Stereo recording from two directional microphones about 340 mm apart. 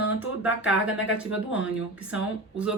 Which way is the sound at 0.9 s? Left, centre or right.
Left.